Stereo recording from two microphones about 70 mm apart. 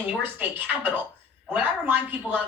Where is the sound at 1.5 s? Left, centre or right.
Right.